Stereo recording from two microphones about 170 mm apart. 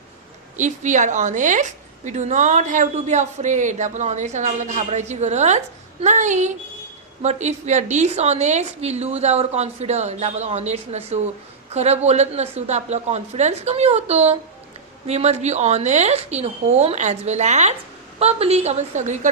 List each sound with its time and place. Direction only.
0.5 s a woman's voice: 45° right (ahead or behind)